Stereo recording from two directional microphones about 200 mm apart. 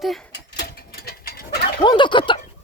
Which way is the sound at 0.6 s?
50° left (ahead or behind).